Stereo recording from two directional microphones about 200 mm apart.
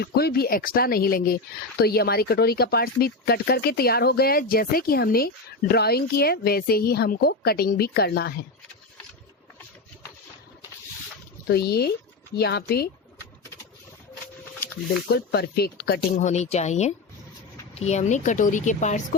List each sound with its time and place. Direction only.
0.0 s speech: 50° left (ahead or behind)
11.4 s speech: 55° left (ahead or behind)
15.1 s speech: 55° left (ahead or behind)
16.2 s a woman's voice: 35° left (ahead or behind)